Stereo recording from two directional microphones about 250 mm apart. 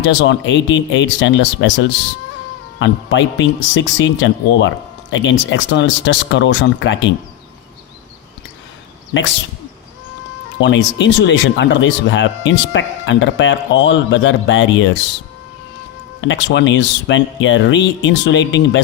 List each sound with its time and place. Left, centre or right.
0.0 s speech: left
10.6 s speech: left
16.2 s speech: left